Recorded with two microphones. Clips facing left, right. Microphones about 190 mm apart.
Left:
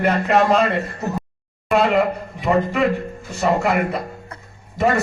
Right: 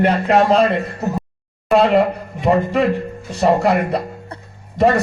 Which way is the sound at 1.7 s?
35° right (ahead or behind).